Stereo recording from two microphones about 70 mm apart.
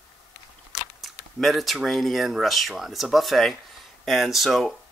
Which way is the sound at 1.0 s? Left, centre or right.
Centre.